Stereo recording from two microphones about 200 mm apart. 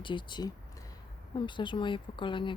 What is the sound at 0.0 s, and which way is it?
A woman's voice, 25° left (ahead or behind).